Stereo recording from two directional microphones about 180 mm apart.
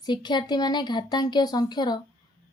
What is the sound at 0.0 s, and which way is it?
Speech, 25° left (ahead or behind).